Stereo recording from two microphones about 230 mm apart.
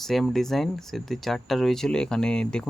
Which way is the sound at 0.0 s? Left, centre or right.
Centre.